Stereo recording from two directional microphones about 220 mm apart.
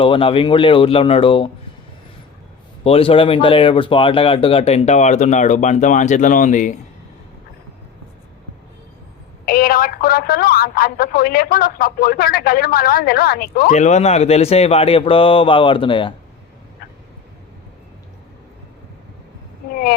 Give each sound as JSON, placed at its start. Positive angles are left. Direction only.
{"t": 0.0, "sound": "speech", "side_deg": 25}
{"t": 2.8, "sound": "speech", "side_deg": 25}
{"t": 9.5, "sound": "a woman's voice", "side_deg": 40}